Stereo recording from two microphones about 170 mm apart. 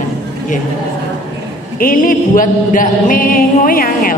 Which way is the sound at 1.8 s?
55° left (ahead or behind).